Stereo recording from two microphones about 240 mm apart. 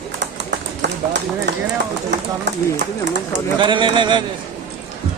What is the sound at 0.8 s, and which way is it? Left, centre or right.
Run, right.